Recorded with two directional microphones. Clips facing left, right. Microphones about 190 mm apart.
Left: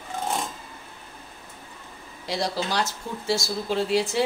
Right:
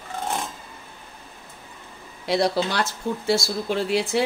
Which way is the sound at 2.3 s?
60° right (ahead or behind).